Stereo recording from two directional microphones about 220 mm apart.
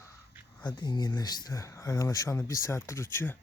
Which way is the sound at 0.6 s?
20° left (ahead or behind).